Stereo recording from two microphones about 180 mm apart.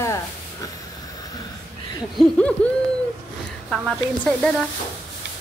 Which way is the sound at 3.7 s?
5° left (ahead or behind).